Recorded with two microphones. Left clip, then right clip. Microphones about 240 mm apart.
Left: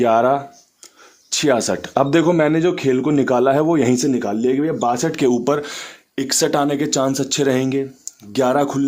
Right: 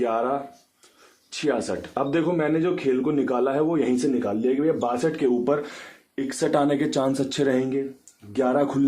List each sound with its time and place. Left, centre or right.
0.0 s speech: left
5.6 s speech: left